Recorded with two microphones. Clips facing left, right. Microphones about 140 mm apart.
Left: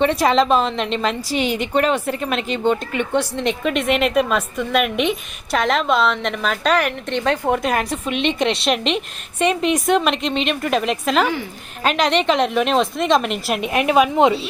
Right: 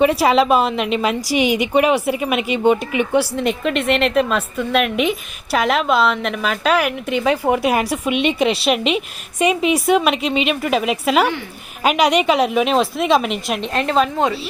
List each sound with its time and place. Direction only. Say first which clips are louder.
0.0 s a woman's voice: right 2 dB; 5° right (ahead or behind)
13.7 s a woman's voice: left 3 dB; 10° left (ahead or behind)